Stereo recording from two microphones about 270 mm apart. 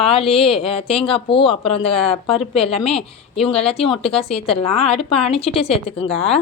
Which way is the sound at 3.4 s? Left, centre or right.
Left.